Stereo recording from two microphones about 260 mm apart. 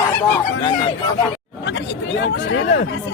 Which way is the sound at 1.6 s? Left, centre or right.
Left.